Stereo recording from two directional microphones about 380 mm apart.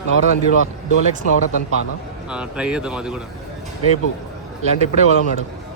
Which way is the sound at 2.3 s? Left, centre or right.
Centre.